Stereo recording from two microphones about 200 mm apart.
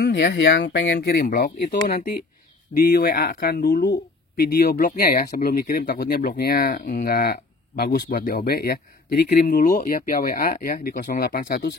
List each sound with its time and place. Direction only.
0.0 s speech: 60° left (ahead or behind); by 11.6 s 45° left (ahead or behind)